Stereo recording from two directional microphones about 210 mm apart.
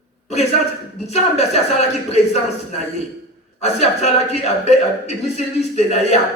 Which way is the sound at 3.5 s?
30° left (ahead or behind).